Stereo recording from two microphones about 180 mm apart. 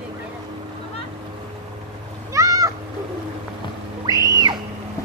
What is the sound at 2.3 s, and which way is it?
Cat, 15° right (ahead or behind).